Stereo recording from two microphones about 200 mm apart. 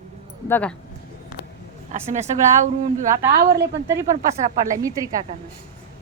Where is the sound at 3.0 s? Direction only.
45° right (ahead or behind).